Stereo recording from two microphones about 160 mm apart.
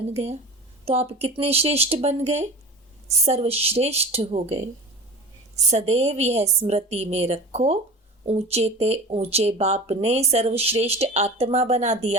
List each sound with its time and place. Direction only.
0.1 s speech: 40° right (ahead or behind)
5.7 s speech: 40° right (ahead or behind)